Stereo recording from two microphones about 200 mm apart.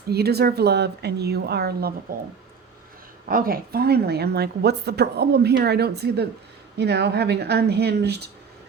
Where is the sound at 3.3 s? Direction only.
45° right (ahead or behind).